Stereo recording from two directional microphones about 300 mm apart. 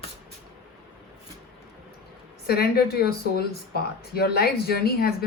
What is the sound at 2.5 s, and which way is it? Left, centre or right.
A woman's voice, left.